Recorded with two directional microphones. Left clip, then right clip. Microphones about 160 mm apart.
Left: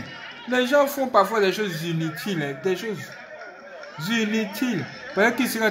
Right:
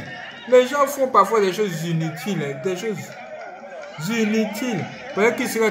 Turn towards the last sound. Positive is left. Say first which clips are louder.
# right 2 dB
turn(degrees=45)  # may be behind; listen again after turning